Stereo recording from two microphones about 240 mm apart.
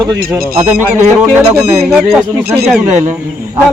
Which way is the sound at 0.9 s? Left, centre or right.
Centre.